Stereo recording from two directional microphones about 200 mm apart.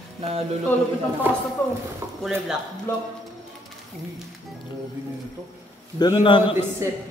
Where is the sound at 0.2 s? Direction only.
30° right (ahead or behind).